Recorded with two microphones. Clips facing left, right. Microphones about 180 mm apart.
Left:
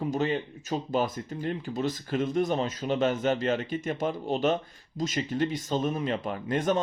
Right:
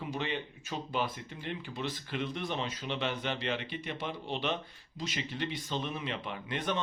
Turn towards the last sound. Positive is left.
turn(degrees=45)  # may be behind; listen again after turning